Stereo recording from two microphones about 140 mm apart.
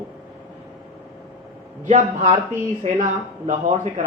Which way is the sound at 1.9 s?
60° right (ahead or behind).